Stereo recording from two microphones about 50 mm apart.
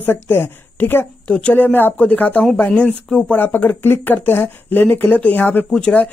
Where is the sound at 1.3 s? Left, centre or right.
Left.